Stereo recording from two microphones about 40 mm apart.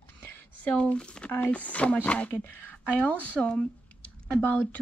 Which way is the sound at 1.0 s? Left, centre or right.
Left.